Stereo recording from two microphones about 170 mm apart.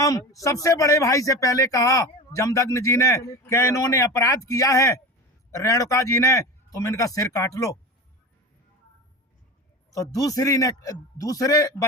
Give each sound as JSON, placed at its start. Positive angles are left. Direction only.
{"t": 0.0, "sound": "speech", "side_deg": 20}
{"t": 9.9, "sound": "speech", "side_deg": 20}